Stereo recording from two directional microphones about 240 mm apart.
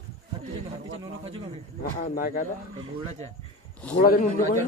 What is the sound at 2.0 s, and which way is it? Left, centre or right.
Speech, left.